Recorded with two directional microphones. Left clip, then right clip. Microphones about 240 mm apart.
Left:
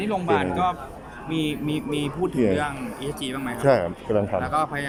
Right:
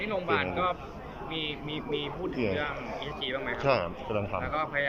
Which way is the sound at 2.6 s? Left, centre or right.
Left.